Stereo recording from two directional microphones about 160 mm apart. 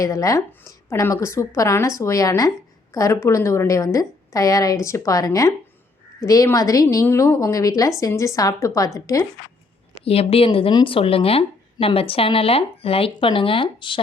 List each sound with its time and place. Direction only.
0.0 s a woman's voice: 20° left (ahead or behind)
9.9 s speech: 40° left (ahead or behind)